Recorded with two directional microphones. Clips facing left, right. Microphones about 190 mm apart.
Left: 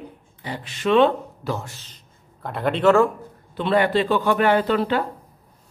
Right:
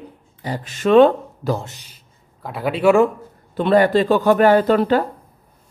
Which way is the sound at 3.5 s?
45° right (ahead or behind).